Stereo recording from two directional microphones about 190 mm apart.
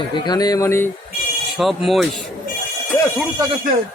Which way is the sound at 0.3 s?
20° left (ahead or behind).